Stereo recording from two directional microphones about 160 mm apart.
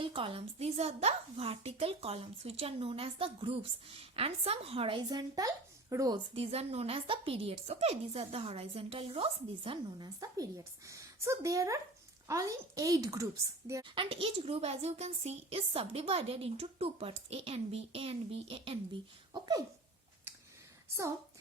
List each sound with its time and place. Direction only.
0.0 s speech: 35° right (ahead or behind)
6.3 s a woman's voice: 40° right (ahead or behind); by 13.2 s 20° right (ahead or behind)
13.9 s speech: 35° right (ahead or behind)
19.3 s a sound: 20° right (ahead or behind)